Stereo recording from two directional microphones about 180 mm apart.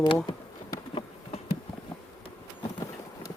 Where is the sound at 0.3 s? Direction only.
30° left (ahead or behind).